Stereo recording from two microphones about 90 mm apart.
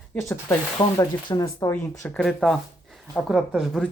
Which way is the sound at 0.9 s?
45° left (ahead or behind).